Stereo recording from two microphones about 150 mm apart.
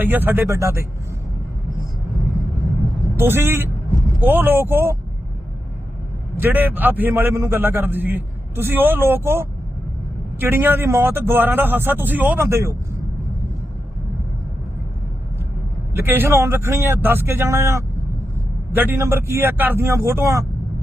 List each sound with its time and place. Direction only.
0.0 s a man's voice: 10° right (ahead or behind)
3.2 s a man's voice: 15° right (ahead or behind)
6.3 s a man's voice: 15° right (ahead or behind)
15.9 s a man's voice: 15° right (ahead or behind)